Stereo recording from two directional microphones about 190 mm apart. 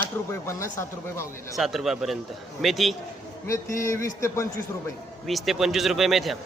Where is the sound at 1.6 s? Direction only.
Centre (ahead or behind).